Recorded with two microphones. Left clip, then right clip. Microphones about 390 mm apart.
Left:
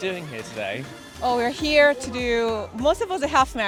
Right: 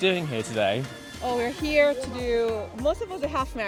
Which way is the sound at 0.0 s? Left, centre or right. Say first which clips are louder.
Right 4 dB; right.